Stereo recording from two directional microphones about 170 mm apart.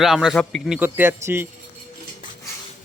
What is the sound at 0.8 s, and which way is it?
Speech, 10° right (ahead or behind).